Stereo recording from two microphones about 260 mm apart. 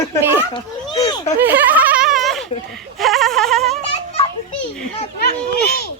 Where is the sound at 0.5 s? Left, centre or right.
Centre.